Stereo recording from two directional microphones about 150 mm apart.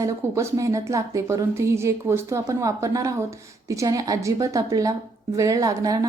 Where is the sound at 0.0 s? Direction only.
20° right (ahead or behind).